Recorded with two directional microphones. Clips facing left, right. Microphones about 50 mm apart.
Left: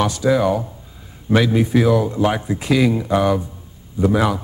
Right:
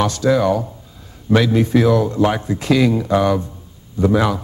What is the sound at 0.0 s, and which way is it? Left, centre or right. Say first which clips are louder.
A man's voice: right 1 dB; centre.